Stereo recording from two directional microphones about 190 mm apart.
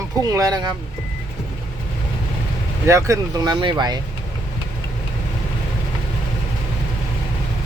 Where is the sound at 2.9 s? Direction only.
15° right (ahead or behind).